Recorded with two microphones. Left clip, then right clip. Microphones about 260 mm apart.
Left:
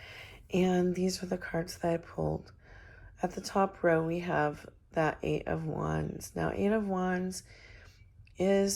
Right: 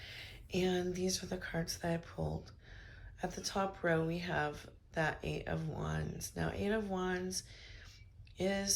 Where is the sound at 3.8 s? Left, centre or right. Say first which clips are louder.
Left 7 dB; left.